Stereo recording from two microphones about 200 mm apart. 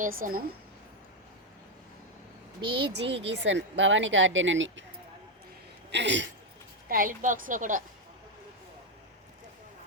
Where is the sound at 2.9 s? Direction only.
60° right (ahead or behind).